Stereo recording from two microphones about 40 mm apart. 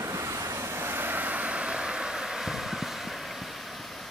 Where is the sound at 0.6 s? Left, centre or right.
Right.